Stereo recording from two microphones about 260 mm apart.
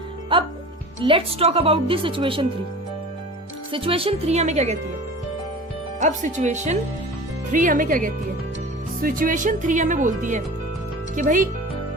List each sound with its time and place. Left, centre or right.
1.0 s speech: right
3.7 s speech: right
6.0 s speech: right